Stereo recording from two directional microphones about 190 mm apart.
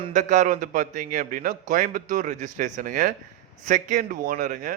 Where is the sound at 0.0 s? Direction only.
40° right (ahead or behind).